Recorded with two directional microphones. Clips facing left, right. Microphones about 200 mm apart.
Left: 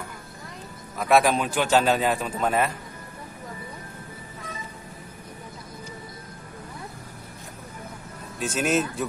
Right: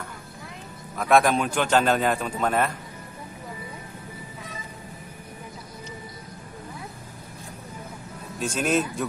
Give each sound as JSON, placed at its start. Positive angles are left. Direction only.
{"t": 0.9, "sound": "a man's voice", "side_deg": 5}
{"t": 8.4, "sound": "a man's voice", "side_deg": 5}